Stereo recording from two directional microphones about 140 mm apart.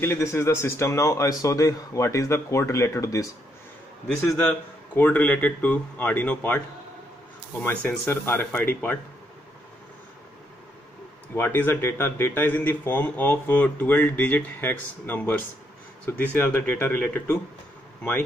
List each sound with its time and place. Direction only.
0.0 s a man's voice: 20° left (ahead or behind)
7.6 s speech: 10° left (ahead or behind)
11.3 s speech: 15° left (ahead or behind)